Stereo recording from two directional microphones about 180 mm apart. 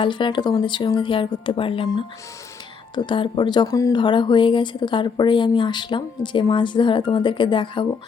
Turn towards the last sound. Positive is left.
turn(degrees=25)  # may be behind; listen again after turning